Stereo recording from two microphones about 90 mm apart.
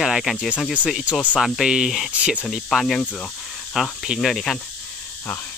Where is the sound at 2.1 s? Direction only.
15° right (ahead or behind).